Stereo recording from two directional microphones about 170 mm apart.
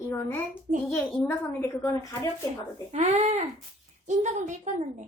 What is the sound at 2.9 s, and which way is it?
A woman's voice, 40° right (ahead or behind).